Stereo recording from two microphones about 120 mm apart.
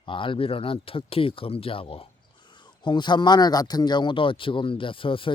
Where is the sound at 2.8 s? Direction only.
40° left (ahead or behind).